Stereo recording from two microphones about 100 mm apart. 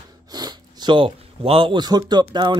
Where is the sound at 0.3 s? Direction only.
45° right (ahead or behind); by 1.8 s 65° right (ahead or behind).